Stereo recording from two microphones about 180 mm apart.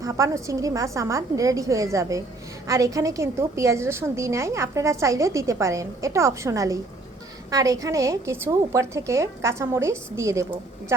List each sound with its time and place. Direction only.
0.0 s a woman's voice: 20° right (ahead or behind)